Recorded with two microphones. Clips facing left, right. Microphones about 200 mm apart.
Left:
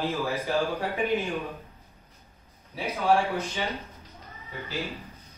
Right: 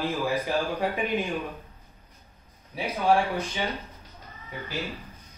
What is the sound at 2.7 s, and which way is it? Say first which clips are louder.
Speech: right 1 dB; 15° right (ahead or behind).